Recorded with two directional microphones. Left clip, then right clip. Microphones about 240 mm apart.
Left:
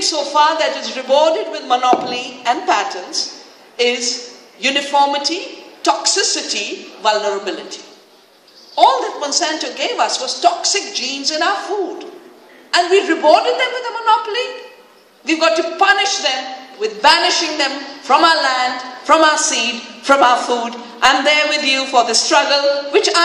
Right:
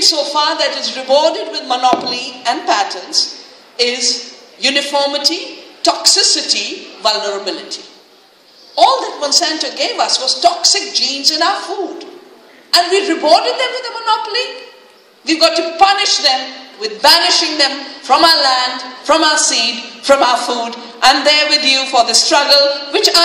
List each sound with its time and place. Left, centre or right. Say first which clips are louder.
0.0 s a woman's voice: right 1 dB; right
12.7 s a man's voice: right 1 dB; right